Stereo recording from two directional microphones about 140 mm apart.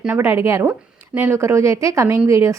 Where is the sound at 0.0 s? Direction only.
15° right (ahead or behind).